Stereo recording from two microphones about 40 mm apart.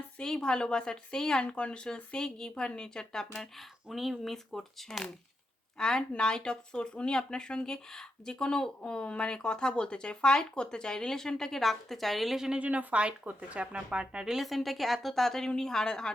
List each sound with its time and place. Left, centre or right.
0.2 s speech: centre
1.5 s a woman's voice: left
3.6 s a woman's voice: centre
12.5 s speech: right; by 14.3 s centre
14.3 s a woman's voice: centre